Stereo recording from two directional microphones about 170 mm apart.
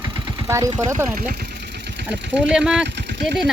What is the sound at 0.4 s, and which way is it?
Speech, 20° right (ahead or behind).